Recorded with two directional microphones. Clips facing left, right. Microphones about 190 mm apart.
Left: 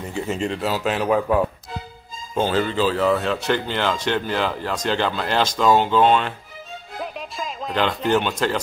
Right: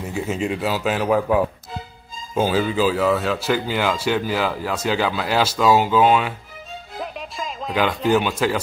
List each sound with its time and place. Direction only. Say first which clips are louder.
0.0 s speech: right 1 dB; 5° right (ahead or behind)
7.0 s music: even; centre (ahead or behind)